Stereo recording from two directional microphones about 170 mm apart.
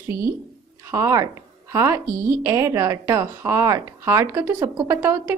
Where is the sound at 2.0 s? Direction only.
55° right (ahead or behind).